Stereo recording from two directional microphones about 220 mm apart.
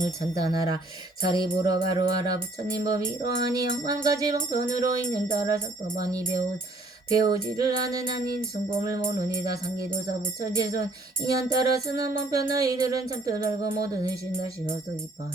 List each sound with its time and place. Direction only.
0.3 s music: 15° right (ahead or behind)
10.4 s music: 15° right (ahead or behind)